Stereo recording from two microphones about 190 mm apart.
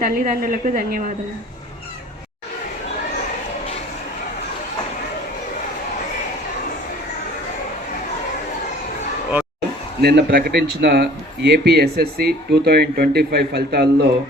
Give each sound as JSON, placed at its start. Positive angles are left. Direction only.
{"t": 0.0, "sound": "a woman's voice", "side_deg": -50}
{"t": 10.0, "sound": "speech", "side_deg": -60}